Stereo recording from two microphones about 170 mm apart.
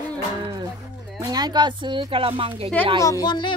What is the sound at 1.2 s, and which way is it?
Speech, 25° right (ahead or behind).